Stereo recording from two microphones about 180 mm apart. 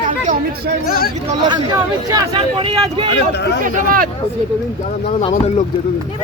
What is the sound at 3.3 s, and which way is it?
Speech, 70° left (ahead or behind).